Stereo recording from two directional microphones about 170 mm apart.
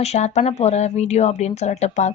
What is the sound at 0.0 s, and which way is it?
Speech, 40° left (ahead or behind).